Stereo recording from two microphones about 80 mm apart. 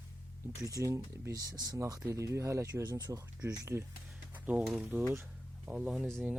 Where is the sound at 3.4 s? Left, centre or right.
Right.